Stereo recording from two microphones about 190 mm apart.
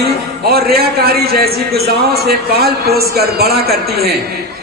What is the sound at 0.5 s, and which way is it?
A man's voice, 55° right (ahead or behind).